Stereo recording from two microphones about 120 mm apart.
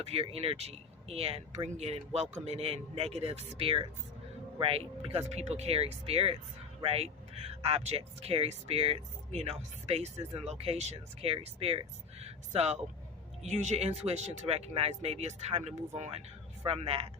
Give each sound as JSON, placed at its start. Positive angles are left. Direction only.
{"t": 0.0, "sound": "speech", "side_deg": -55}
{"t": 13.4, "sound": "speech", "side_deg": -70}